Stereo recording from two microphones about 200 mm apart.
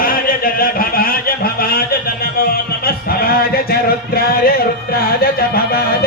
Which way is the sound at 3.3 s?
50° left (ahead or behind).